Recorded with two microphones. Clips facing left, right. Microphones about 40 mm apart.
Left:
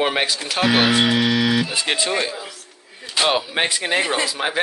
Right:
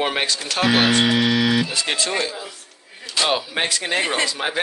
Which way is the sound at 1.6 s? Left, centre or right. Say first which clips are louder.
Left 2 dB; centre.